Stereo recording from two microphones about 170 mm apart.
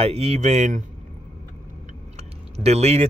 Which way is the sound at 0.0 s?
35° right (ahead or behind).